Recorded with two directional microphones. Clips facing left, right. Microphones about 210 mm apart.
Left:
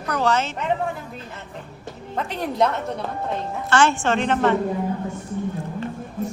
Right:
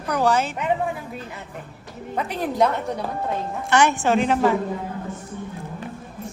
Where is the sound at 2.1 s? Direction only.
5° right (ahead or behind).